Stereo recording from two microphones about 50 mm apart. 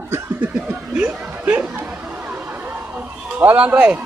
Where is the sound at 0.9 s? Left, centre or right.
Right.